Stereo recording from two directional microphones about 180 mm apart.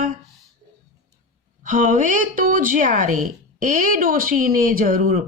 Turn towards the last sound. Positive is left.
turn(degrees=-50)  # may be behind; listen again after turning